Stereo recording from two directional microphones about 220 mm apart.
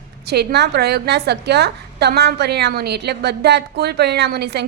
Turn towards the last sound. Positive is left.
turn(degrees=-50)  # may be behind; listen again after turning